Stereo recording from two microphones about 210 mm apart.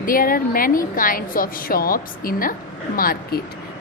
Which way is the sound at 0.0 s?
40° left (ahead or behind).